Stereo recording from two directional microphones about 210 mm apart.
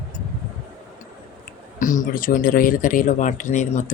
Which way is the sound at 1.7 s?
40° left (ahead or behind).